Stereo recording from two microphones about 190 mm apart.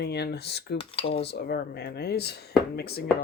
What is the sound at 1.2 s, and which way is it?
Speech, 60° left (ahead or behind).